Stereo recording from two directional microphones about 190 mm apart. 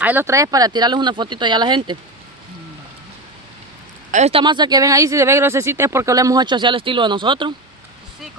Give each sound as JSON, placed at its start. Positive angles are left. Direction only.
{"t": 0.0, "sound": "speech", "side_deg": -10}
{"t": 4.1, "sound": "speech", "side_deg": -35}